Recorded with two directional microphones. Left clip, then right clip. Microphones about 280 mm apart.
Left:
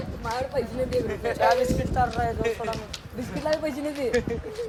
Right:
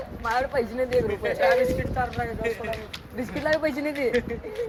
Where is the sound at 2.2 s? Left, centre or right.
Centre.